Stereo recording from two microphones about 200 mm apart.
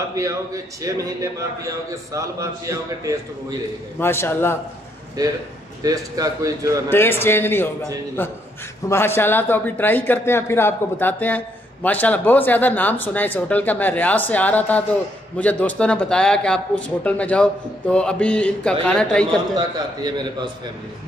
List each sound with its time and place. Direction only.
0.1 s a man's voice: 15° right (ahead or behind)
4.0 s a man's voice: 10° left (ahead or behind)
5.8 s a man's voice: 20° right (ahead or behind)
6.9 s a man's voice: 10° left (ahead or behind)